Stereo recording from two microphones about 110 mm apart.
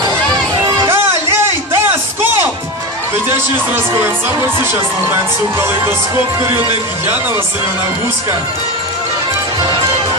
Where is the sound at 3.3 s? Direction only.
20° right (ahead or behind).